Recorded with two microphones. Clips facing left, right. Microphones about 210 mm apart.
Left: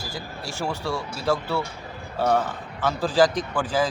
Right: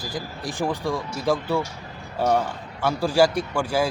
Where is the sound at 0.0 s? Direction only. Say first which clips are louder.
Right 3 dB; 15° right (ahead or behind).